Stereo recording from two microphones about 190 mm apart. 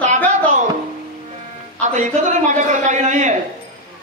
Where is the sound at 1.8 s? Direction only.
40° right (ahead or behind).